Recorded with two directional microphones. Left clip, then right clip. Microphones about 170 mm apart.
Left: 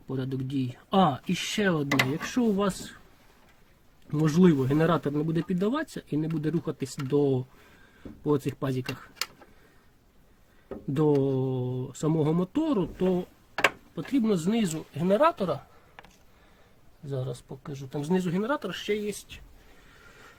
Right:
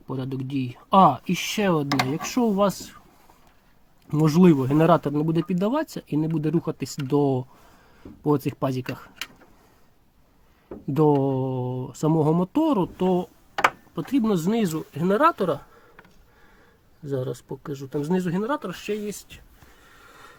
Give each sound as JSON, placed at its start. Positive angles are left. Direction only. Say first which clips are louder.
{"t": 0.1, "sound": "speech", "louder": "right 2 dB", "side_deg": -15}
{"t": 4.1, "sound": "speech", "louder": "right 5 dB", "side_deg": -20}
{"t": 10.9, "sound": "speech", "louder": "right 4 dB", "side_deg": -20}
{"t": 17.1, "sound": "speech", "louder": "right 7 dB", "side_deg": -15}